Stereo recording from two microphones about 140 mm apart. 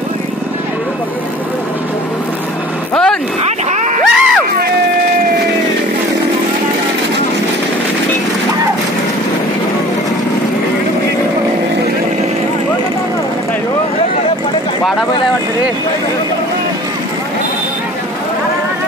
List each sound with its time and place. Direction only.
2.9 s vehicle: 5° left (ahead or behind)
3.7 s a sound: 60° right (ahead or behind)
4.0 s crowd: centre (ahead or behind)